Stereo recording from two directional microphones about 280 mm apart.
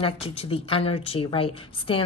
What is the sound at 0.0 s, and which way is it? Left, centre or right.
A woman's voice, left.